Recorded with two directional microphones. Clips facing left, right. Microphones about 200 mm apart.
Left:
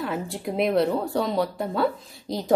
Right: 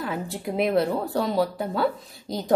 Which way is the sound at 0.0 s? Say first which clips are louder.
Left 1 dB; centre (ahead or behind).